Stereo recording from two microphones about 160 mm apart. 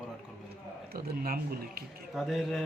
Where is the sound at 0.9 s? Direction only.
70° right (ahead or behind).